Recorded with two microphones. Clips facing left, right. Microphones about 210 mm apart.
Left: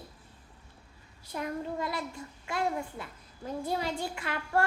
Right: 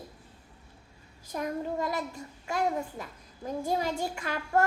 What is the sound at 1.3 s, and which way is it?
A child's voice, 45° right (ahead or behind).